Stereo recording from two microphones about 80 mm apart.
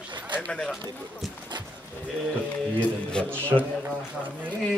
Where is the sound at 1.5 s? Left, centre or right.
Right.